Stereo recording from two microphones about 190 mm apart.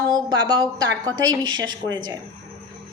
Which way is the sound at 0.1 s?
20° right (ahead or behind).